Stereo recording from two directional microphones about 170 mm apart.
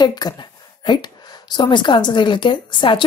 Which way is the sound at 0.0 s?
25° left (ahead or behind).